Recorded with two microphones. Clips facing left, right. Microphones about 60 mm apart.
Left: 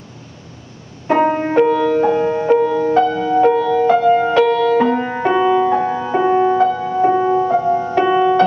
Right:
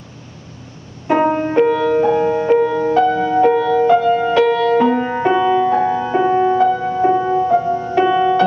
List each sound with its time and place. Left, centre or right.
1.0 s music: centre
3.8 s music: centre